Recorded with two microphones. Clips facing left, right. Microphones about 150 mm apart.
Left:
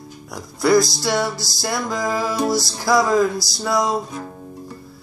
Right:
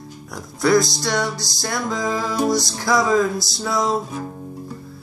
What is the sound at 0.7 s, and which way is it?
Music, 20° right (ahead or behind).